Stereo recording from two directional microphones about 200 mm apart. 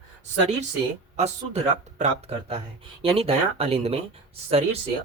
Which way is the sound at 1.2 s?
35° right (ahead or behind).